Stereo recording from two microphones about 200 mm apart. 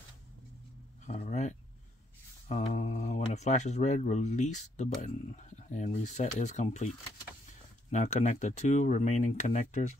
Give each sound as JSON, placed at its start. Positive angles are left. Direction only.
{"t": 1.0, "sound": "speech", "side_deg": 35}
{"t": 7.9, "sound": "speech", "side_deg": 35}